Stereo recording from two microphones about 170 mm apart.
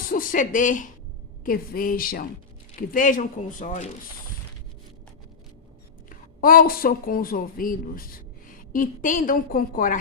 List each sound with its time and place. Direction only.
0.1 s speech: 55° left (ahead or behind)
6.1 s speech: 55° left (ahead or behind)